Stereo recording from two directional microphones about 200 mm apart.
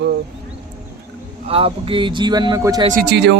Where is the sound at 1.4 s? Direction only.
25° right (ahead or behind).